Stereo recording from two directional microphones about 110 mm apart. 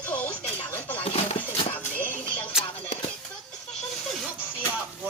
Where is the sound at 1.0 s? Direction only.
60° left (ahead or behind).